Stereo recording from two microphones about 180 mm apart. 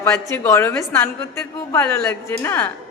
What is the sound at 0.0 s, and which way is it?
Speech, 15° left (ahead or behind).